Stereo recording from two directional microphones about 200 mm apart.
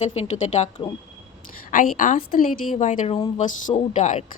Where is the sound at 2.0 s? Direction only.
45° left (ahead or behind).